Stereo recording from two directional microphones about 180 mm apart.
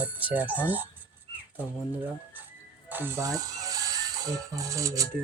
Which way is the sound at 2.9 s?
10° right (ahead or behind).